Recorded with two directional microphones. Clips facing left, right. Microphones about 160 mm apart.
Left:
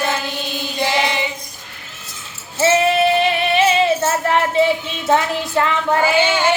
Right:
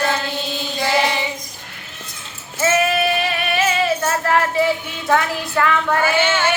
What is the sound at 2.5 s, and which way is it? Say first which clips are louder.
Female singing: left 3 dB; 25° left (ahead or behind).